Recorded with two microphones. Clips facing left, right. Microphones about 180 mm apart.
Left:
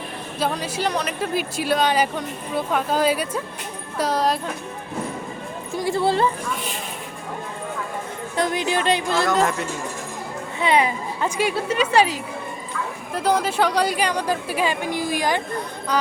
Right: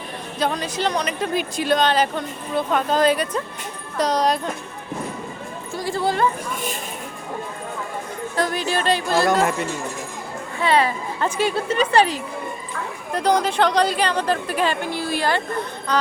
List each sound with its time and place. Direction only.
0.3 s speech: 5° left (ahead or behind)
5.8 s music: 25° left (ahead or behind)
8.4 s music: 20° left (ahead or behind)
9.4 s speech: 5° right (ahead or behind)
10.6 s speech: 15° left (ahead or behind)